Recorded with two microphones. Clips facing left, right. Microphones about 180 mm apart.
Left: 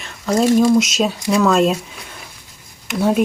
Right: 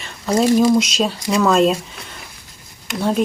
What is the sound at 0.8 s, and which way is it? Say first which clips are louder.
Speech: left 2 dB; centre (ahead or behind).